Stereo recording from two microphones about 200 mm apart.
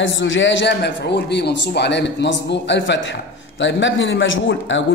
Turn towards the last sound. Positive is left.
turn(degrees=65)  # may be behind; listen again after turning